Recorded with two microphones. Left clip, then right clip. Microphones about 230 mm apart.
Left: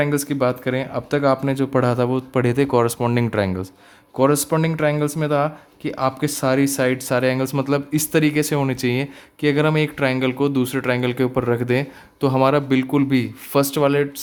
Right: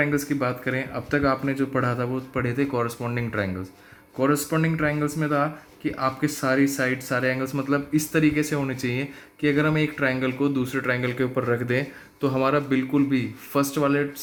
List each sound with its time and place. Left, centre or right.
0.0 s speech: left